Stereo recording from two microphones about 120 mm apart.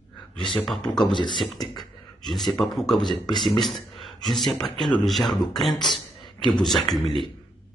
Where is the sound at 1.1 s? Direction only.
40° left (ahead or behind).